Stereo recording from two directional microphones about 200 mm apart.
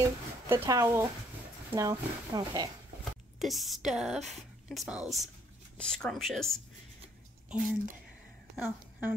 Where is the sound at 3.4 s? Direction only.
Centre (ahead or behind).